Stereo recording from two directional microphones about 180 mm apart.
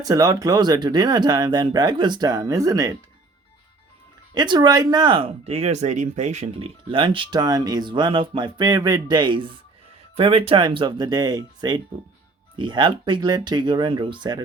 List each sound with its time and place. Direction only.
0.0 s speech: 20° right (ahead or behind)
4.4 s speech: 25° right (ahead or behind); by 6.5 s 40° right (ahead or behind)
6.9 s speech: 30° right (ahead or behind)